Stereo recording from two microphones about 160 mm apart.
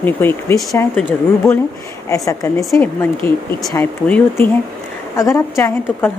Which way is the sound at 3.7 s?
15° left (ahead or behind).